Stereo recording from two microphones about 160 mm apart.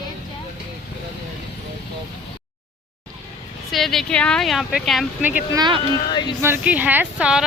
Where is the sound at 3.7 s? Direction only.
Centre (ahead or behind).